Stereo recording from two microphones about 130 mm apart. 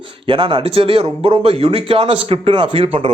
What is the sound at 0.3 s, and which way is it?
Speech, 40° right (ahead or behind).